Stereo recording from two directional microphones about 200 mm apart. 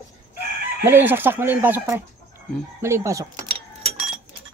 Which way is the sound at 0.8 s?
10° right (ahead or behind).